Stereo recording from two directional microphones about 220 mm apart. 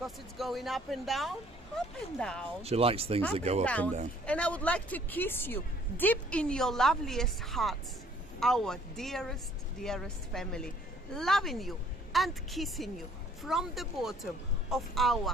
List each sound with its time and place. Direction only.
0.0 s speech: centre (ahead or behind)
2.6 s speech: 25° right (ahead or behind)
3.6 s speech: 5° left (ahead or behind)